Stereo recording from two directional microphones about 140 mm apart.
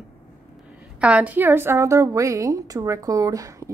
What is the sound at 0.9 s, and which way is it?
A woman's voice, 10° right (ahead or behind).